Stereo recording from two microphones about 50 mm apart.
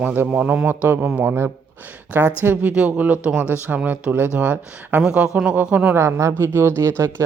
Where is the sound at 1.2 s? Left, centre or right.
Right.